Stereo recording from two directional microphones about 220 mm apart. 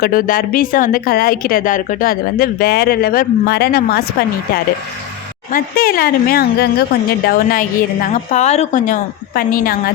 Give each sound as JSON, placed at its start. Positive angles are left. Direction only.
{"t": 0.0, "sound": "a woman's voice", "side_deg": 40}